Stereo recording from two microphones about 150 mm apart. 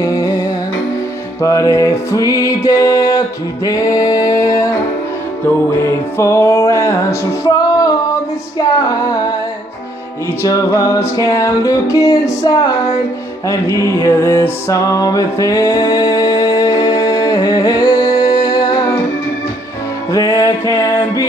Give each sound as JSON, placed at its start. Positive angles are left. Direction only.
{"t": 0.0, "sound": "music", "side_deg": 25}
{"t": 1.4, "sound": "music", "side_deg": 20}
{"t": 5.7, "sound": "music", "side_deg": 15}
{"t": 10.4, "sound": "music", "side_deg": 20}
{"t": 20.1, "sound": "music", "side_deg": 20}